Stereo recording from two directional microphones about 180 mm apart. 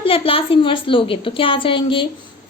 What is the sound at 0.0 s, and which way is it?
A woman's voice, 30° left (ahead or behind).